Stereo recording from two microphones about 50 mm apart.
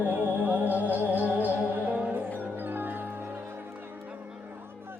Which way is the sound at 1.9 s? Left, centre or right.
Right.